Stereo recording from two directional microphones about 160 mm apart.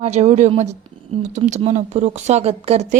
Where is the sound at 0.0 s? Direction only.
45° right (ahead or behind).